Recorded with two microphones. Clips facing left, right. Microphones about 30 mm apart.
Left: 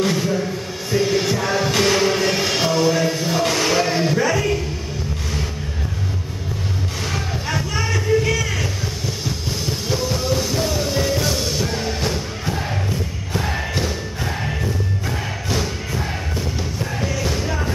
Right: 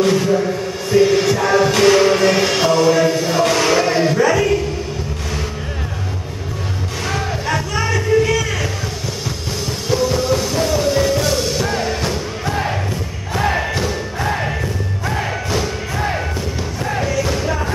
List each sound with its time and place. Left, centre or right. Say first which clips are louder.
0.0 s music: right 5 dB; centre
7.1 s music: right 6 dB; centre
9.7 s music: right 6 dB; centre
13.4 s music: right 6 dB; right
17.2 s music: right 4 dB; centre